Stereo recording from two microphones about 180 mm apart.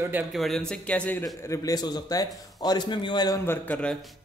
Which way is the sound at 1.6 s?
20° left (ahead or behind).